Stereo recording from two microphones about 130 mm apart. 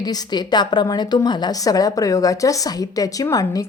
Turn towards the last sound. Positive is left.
turn(degrees=25)  # may be behind; listen again after turning